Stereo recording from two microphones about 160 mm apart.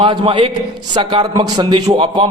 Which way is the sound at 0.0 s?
35° right (ahead or behind).